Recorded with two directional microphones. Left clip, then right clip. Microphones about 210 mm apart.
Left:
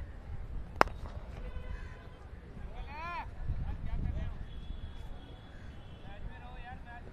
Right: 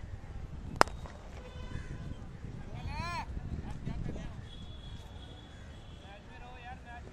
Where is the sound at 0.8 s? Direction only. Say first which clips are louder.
Right 1 dB; centre (ahead or behind).